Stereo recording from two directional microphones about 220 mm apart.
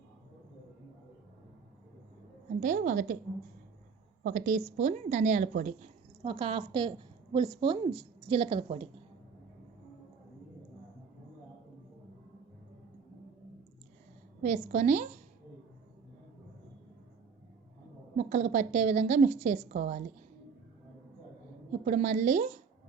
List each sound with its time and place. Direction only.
2.6 s a woman's voice: 35° right (ahead or behind)
4.2 s a woman's voice: 40° right (ahead or behind)
6.2 s a woman's voice: 25° right (ahead or behind)
14.4 s a woman's voice: 35° right (ahead or behind)
18.2 s a woman's voice: 35° right (ahead or behind)
21.7 s a woman's voice: 35° right (ahead or behind)